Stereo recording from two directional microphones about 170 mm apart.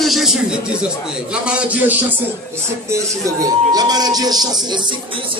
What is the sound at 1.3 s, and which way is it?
Speech, 5° right (ahead or behind).